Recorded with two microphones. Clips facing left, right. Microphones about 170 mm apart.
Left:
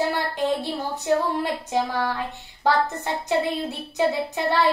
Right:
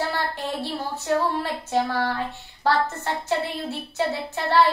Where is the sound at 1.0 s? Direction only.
15° left (ahead or behind).